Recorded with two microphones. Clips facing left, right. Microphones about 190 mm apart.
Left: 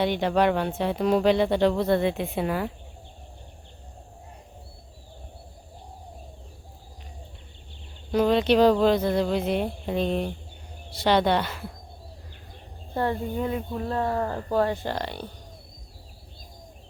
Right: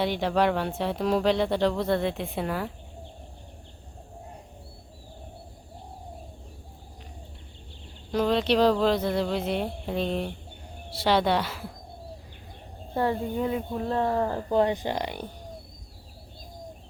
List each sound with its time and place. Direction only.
0.0 s speech: centre (ahead or behind)
8.1 s speech: centre (ahead or behind)
12.9 s speech: 10° right (ahead or behind)